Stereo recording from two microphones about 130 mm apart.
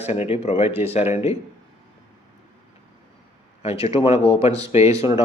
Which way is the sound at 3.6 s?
50° left (ahead or behind).